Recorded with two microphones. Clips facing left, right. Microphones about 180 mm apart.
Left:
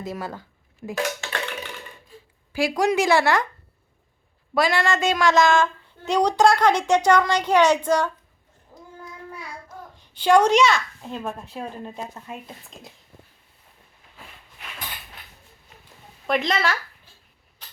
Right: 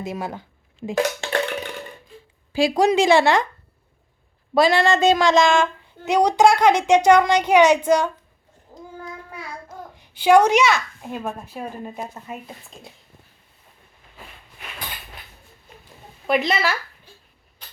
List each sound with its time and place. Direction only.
0.0 s speech: 20° right (ahead or behind)
2.5 s speech: 25° right (ahead or behind)
4.5 s speech: 30° right (ahead or behind)
6.1 s a woman's voice: 10° right (ahead or behind)
8.7 s child singing: 35° right (ahead or behind)
9.9 s a woman's voice: 10° right (ahead or behind)
16.2 s speech: 5° right (ahead or behind)